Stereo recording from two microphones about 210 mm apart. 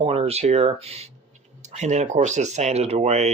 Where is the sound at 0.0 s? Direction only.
30° right (ahead or behind).